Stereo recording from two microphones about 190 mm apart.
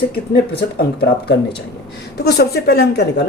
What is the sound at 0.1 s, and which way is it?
Speech, 55° left (ahead or behind).